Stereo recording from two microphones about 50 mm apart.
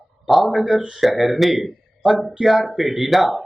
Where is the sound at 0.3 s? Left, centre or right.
Centre.